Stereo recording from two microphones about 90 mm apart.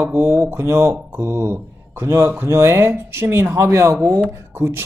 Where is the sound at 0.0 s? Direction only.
25° right (ahead or behind).